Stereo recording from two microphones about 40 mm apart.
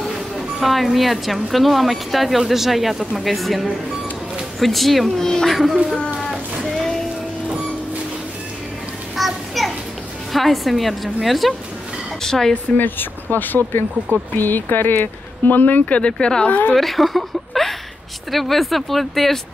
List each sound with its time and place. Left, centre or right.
0.6 s speech: centre
5.5 s speech: centre
9.1 s children playing: centre
10.3 s speech: centre
12.2 s speech: centre
12.7 s speech: left
15.8 s a woman's voice: left
16.1 s speech: left
16.4 s a woman's voice: left
16.7 s a woman's voice: centre